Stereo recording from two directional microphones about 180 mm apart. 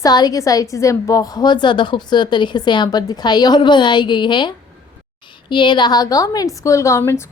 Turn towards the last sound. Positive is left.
turn(degrees=15)  # may be behind; listen again after turning